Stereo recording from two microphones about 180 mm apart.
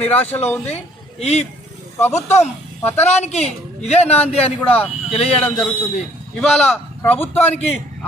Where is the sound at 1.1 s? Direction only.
35° left (ahead or behind).